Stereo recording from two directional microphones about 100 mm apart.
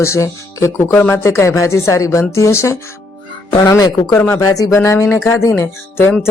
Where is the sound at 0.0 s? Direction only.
30° left (ahead or behind).